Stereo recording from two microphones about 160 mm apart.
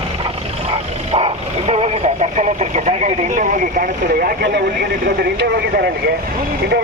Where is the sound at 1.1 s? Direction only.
40° right (ahead or behind); by 5.9 s 80° right.